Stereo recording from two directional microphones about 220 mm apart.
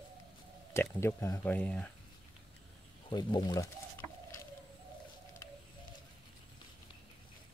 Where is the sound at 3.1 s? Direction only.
20° left (ahead or behind).